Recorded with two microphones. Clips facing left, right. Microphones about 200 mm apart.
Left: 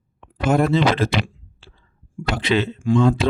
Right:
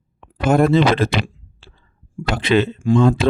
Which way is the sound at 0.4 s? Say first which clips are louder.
Right 3 dB; 50° right (ahead or behind).